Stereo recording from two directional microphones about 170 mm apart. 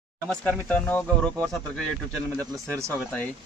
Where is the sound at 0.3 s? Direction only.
10° left (ahead or behind).